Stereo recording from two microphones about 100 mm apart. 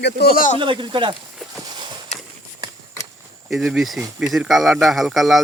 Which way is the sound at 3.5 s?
Centre (ahead or behind).